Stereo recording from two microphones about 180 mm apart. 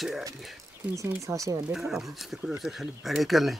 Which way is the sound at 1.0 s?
15° right (ahead or behind).